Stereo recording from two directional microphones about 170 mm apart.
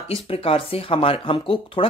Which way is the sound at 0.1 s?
35° left (ahead or behind).